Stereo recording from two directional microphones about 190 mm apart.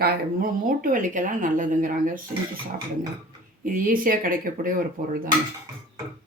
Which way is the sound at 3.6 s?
45° right (ahead or behind).